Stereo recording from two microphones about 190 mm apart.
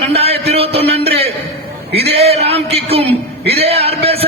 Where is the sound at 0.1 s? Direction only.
30° right (ahead or behind).